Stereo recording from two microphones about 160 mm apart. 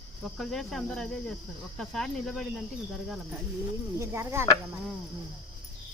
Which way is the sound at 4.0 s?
15° right (ahead or behind).